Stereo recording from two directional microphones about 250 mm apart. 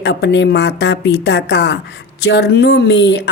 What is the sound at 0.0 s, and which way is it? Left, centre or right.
Speech, left.